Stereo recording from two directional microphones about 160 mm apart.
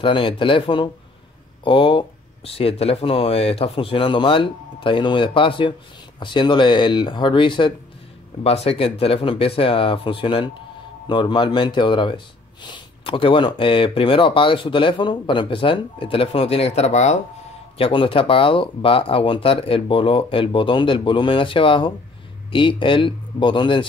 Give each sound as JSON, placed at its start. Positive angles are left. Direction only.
{"t": 0.0, "sound": "speech", "side_deg": 30}
{"t": 17.7, "sound": "speech", "side_deg": 35}